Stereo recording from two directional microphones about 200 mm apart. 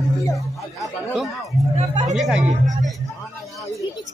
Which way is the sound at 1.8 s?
30° right (ahead or behind).